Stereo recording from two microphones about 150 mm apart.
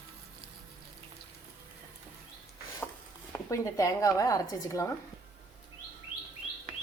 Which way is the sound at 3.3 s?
20° left (ahead or behind).